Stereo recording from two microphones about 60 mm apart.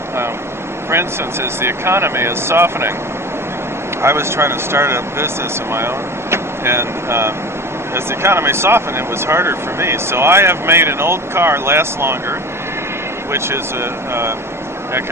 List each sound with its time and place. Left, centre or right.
0.9 s speech: right
4.0 s speech: right
6.3 s speech: right
14.1 s speech: right